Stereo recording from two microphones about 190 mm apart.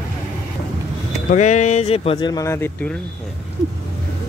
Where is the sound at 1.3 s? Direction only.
40° left (ahead or behind); by 3.0 s 10° left (ahead or behind).